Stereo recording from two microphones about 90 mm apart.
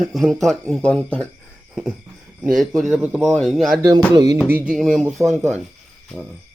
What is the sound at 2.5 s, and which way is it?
Speech, centre (ahead or behind).